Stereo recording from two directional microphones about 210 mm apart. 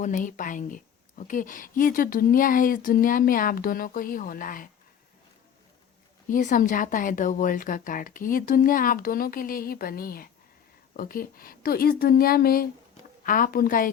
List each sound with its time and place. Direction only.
0.0 s a woman's voice: 35° left (ahead or behind)
6.2 s a woman's voice: 40° left (ahead or behind)